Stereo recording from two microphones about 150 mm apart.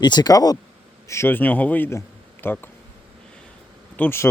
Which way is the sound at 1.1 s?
15° left (ahead or behind).